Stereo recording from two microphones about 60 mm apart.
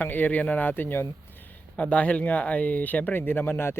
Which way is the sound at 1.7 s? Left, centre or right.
Left.